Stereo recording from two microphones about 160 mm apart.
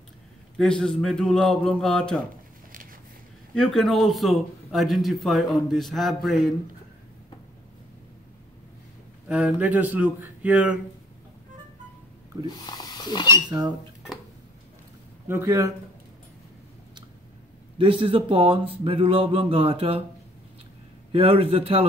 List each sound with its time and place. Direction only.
0.6 s a man's voice: 5° left (ahead or behind)
3.5 s a man's voice: centre (ahead or behind)
9.3 s speech: 5° right (ahead or behind)
12.4 s speech: 25° left (ahead or behind)
13.5 s speech: 25° right (ahead or behind)
15.2 s speech: 15° right (ahead or behind)
17.7 s speech: 35° right (ahead or behind)
21.1 s speech: 35° right (ahead or behind)